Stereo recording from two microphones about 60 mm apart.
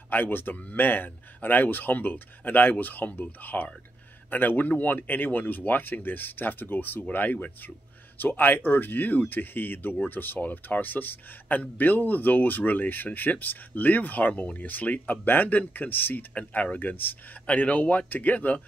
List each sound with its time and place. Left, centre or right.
0.1 s a man's voice: left